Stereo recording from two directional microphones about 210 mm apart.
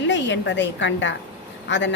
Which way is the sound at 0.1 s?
60° left (ahead or behind).